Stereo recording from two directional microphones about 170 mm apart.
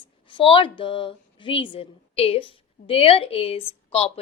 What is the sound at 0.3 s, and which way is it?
A woman's voice, 30° left (ahead or behind).